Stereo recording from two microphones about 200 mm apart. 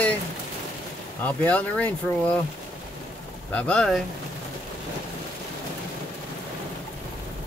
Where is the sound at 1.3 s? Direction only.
5° left (ahead or behind).